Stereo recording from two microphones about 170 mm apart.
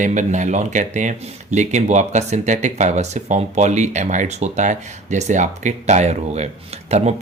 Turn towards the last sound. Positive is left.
turn(degrees=-40)  # may be behind; listen again after turning